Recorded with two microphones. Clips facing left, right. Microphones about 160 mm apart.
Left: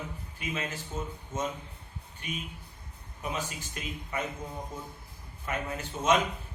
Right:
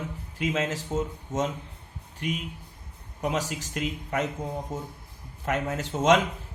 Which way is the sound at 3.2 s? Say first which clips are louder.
Right 7 dB; 85° right.